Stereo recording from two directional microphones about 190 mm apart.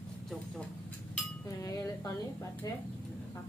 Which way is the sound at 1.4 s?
15° left (ahead or behind).